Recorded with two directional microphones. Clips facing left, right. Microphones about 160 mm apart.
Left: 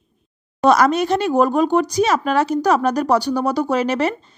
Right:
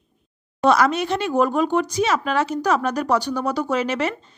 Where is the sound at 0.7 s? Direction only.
40° left (ahead or behind).